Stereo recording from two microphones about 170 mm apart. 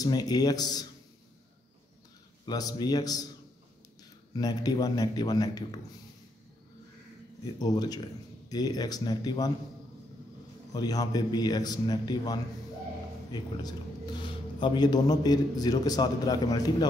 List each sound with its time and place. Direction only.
0.0 s a man's voice: 20° left (ahead or behind)
2.4 s a man's voice: 25° left (ahead or behind)
4.4 s a man's voice: 20° left (ahead or behind)
7.5 s a man's voice: 25° left (ahead or behind)
10.7 s a man's voice: 20° left (ahead or behind)